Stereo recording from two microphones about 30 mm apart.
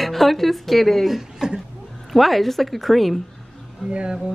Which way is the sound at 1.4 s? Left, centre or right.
Right.